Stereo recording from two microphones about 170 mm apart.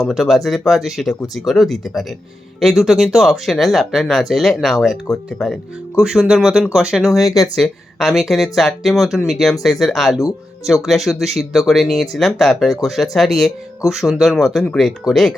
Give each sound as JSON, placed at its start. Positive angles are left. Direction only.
{"t": 0.0, "sound": "speech", "side_deg": 0}
{"t": 7.2, "sound": "speech", "side_deg": 20}
{"t": 7.5, "sound": "speech", "side_deg": 0}